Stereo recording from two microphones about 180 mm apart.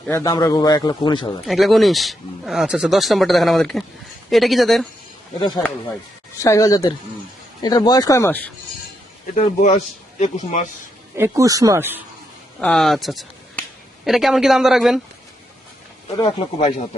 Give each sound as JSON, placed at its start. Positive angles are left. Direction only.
{"t": 0.0, "sound": "a man's voice", "side_deg": 15}
{"t": 1.5, "sound": "speech", "side_deg": 0}
{"t": 5.4, "sound": "a man's voice", "side_deg": 20}
{"t": 9.6, "sound": "a man's voice", "side_deg": 40}
{"t": 11.2, "sound": "speech", "side_deg": -20}
{"t": 12.5, "sound": "speech", "side_deg": 5}
{"t": 16.1, "sound": "a man's voice", "side_deg": 30}